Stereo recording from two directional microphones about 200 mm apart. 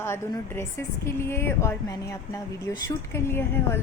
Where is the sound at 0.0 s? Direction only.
15° left (ahead or behind).